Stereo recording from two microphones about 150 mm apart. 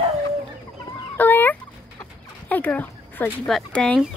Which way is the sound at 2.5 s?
10° left (ahead or behind).